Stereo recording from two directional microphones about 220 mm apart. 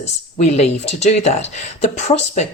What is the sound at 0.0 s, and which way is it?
Speech, 30° left (ahead or behind).